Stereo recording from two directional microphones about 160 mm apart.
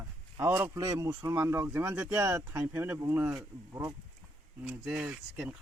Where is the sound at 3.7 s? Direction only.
25° right (ahead or behind).